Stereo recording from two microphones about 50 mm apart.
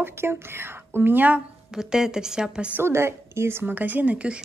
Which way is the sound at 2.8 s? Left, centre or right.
Right.